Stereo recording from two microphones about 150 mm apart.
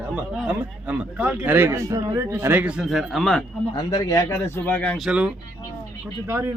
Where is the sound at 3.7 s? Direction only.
25° left (ahead or behind); by 5.0 s 10° left (ahead or behind).